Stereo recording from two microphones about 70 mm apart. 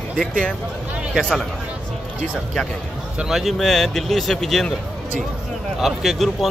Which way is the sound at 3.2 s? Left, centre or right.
Centre.